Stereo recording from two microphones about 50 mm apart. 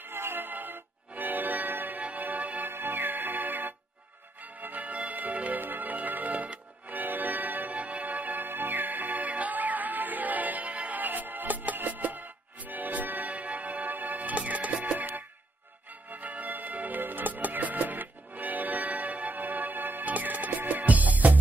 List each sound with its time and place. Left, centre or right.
0.0 s music: right
2.7 s music: right
13.3 s music: right